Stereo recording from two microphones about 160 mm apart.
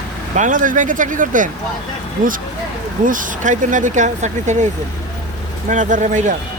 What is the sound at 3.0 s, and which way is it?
Speech, 55° right (ahead or behind).